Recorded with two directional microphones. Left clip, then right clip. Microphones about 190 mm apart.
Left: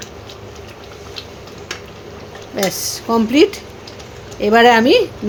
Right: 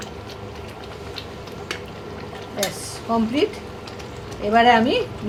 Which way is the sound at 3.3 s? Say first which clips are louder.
Left 9 dB; 65° left (ahead or behind).